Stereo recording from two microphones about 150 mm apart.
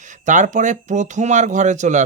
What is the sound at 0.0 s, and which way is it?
Speech, 55° right (ahead or behind).